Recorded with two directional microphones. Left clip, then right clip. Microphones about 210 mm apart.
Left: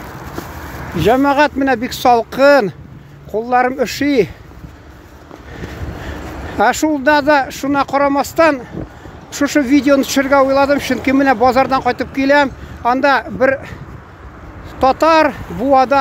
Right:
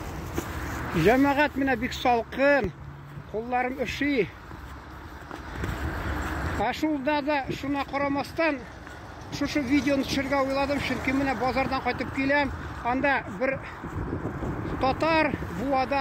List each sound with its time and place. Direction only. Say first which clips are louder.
1.0 s speech: left 10 dB; 20° left (ahead or behind); by 4.3 s 40° left (ahead or behind)
6.6 s speech: left 15 dB; 45° left (ahead or behind)
14.8 s speech: left 13 dB; 40° left (ahead or behind)